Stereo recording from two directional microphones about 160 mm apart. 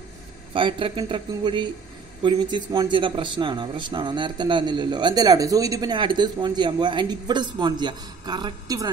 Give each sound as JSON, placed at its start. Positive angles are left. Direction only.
{"t": 0.5, "sound": "speech", "side_deg": -30}